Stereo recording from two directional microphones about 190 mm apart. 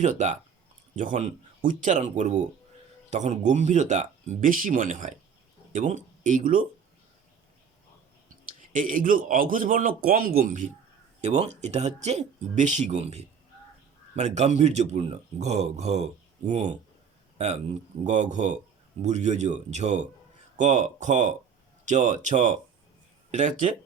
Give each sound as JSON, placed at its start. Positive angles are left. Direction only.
{"t": 0.0, "sound": "speech", "side_deg": -40}
{"t": 8.7, "sound": "a man's voice", "side_deg": -45}